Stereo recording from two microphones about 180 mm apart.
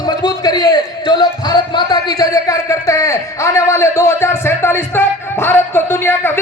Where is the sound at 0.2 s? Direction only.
20° left (ahead or behind).